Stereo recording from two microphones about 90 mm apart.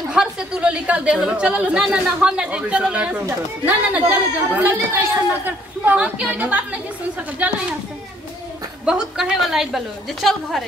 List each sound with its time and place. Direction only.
0.1 s speech: 10° right (ahead or behind)
8.8 s speech: 10° right (ahead or behind)